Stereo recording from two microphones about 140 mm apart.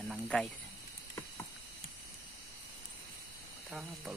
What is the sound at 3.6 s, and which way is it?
Speech, 5° right (ahead or behind).